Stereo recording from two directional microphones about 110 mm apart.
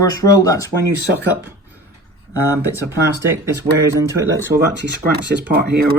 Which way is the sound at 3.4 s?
30° right (ahead or behind).